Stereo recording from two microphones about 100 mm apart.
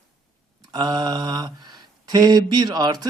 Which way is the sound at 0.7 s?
45° right (ahead or behind).